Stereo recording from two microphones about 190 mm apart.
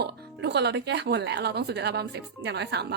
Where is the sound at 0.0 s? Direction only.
60° right (ahead or behind).